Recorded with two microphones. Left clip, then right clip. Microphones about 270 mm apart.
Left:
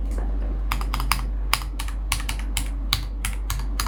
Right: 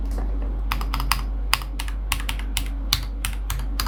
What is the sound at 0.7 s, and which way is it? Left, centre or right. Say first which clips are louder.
Computer keyboard: right 1 dB; centre.